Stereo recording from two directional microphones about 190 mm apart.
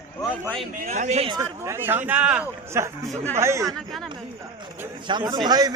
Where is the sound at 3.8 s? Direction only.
Centre (ahead or behind).